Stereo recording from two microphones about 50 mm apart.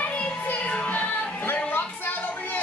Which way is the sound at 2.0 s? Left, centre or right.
Left.